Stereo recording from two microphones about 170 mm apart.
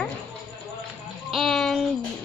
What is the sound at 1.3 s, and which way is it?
Speech, centre (ahead or behind).